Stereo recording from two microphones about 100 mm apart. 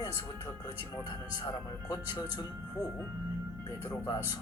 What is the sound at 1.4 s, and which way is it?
Speech, 40° left (ahead or behind).